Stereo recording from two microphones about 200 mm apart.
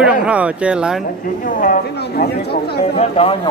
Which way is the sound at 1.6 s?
45° left (ahead or behind).